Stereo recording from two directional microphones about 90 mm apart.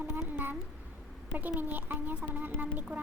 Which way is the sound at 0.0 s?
20° right (ahead or behind).